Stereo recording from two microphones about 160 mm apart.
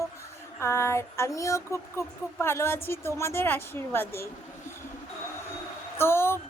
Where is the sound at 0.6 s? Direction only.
15° left (ahead or behind).